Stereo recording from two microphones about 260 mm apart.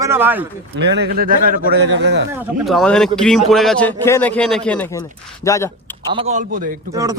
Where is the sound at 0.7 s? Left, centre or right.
Right.